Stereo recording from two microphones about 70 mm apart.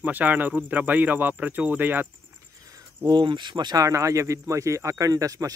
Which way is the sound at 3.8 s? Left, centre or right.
Right.